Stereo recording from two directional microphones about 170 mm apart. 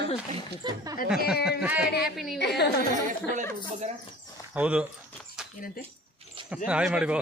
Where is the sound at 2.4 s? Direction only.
80° left.